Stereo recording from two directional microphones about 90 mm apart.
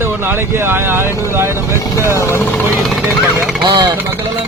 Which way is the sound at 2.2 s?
30° left (ahead or behind).